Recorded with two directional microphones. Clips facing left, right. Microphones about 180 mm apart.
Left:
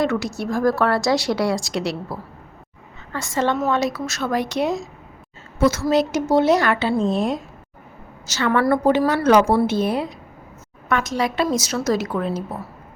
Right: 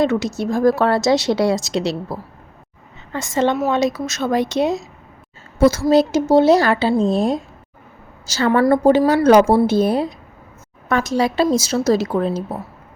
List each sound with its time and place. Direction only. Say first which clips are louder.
0.0 s a woman's voice: right 4 dB; 20° right (ahead or behind)
5.5 s a woman's voice: right 4 dB; 35° right (ahead or behind)